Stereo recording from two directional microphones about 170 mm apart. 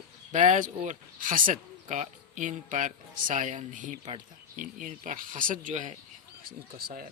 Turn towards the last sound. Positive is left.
turn(degrees=-60)  # may be behind; listen again after turning